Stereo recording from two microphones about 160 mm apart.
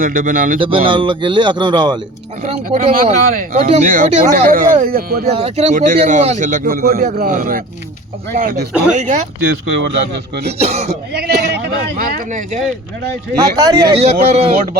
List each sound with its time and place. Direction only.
0.0 s speech: 60° right (ahead or behind)
0.6 s speech: 30° right (ahead or behind)
2.8 s speech: 40° right (ahead or behind)
4.4 s speech: 60° right (ahead or behind)
5.2 s speech: 40° right (ahead or behind); by 7.6 s 60° right (ahead or behind)
8.9 s speech: 50° right (ahead or behind)
9.4 s speech: 90° right
10.6 s speech: 40° right (ahead or behind)
11.1 s a man's voice: 85° right; by 12.4 s 65° right (ahead or behind)
13.3 s speech: 25° right (ahead or behind)
14.0 s speech: 40° right (ahead or behind)